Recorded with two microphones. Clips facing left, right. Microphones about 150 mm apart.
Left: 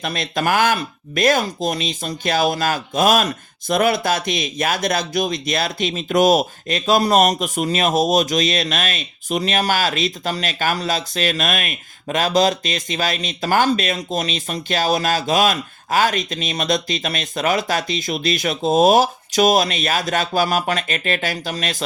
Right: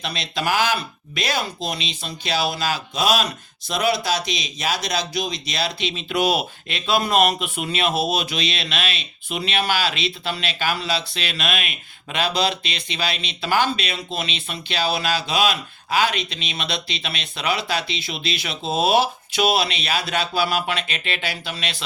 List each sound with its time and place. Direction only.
0.0 s speech: 50° left (ahead or behind)